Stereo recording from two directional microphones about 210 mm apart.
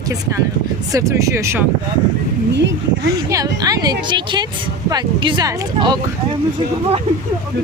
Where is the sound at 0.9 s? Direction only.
15° right (ahead or behind).